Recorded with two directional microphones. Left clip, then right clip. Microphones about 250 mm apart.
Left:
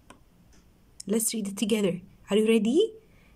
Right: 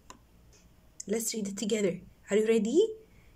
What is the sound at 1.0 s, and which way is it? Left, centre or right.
Speech, centre.